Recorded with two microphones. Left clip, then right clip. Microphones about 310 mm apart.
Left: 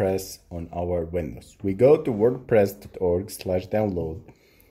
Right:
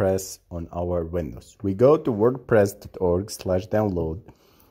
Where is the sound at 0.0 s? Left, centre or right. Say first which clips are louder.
Right 2 dB; right.